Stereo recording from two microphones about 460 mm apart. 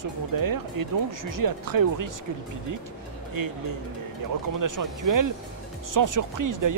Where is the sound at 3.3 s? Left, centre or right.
Right.